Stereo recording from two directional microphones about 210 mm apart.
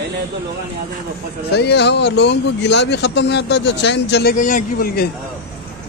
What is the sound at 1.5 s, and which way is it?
Speech, 50° left (ahead or behind).